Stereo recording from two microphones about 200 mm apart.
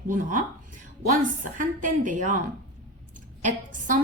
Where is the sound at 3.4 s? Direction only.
40° right (ahead or behind).